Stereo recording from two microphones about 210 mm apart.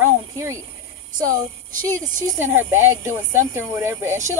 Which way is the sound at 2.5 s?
10° right (ahead or behind).